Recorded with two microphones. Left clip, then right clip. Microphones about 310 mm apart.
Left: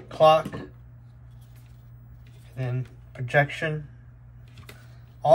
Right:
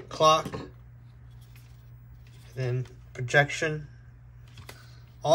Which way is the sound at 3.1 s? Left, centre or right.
Centre.